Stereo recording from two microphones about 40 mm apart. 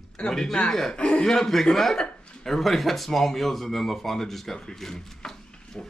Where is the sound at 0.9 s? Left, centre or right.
Left.